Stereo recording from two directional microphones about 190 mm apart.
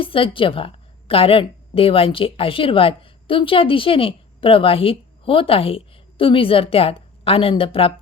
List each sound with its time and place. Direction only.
0.0 s a woman's voice: 30° left (ahead or behind)